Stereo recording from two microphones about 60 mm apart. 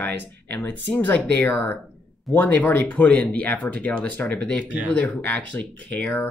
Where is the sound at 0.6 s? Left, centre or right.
Left.